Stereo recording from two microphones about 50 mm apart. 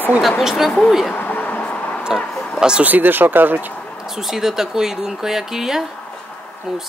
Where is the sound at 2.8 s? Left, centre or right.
Right.